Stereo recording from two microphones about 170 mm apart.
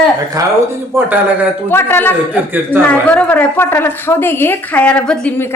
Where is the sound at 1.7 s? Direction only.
15° left (ahead or behind).